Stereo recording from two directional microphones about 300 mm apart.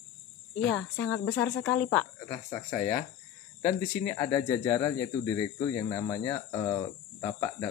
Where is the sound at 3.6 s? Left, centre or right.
Left.